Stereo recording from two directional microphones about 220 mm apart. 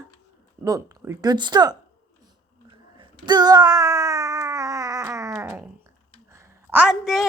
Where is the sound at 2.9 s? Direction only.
20° right (ahead or behind).